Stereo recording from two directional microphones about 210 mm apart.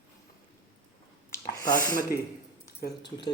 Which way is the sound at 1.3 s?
15° left (ahead or behind).